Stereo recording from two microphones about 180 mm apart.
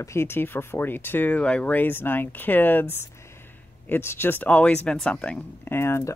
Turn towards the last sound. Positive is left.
turn(degrees=15)  # may be behind; listen again after turning